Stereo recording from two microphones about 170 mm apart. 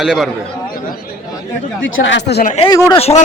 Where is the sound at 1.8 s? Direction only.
90° left.